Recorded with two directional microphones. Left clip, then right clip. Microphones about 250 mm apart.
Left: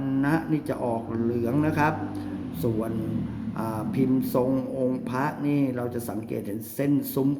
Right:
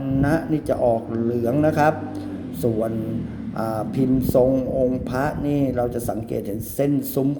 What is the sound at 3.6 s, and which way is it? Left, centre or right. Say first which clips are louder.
Speech: right 5 dB; centre.